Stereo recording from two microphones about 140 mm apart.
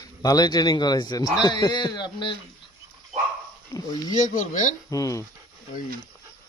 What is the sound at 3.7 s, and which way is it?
Speech, 20° left (ahead or behind).